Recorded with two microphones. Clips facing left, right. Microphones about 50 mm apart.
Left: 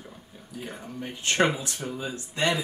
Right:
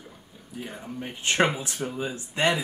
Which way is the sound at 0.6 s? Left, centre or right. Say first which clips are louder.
Even; centre.